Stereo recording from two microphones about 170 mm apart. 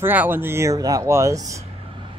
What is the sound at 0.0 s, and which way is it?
Speech, 10° right (ahead or behind).